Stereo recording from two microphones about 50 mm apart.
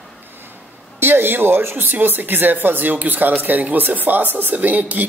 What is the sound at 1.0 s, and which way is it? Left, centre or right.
Speech, right.